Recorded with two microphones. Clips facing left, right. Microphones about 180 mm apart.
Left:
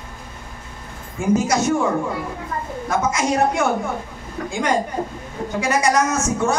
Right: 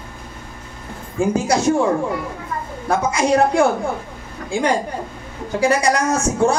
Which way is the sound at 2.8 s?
30° right (ahead or behind).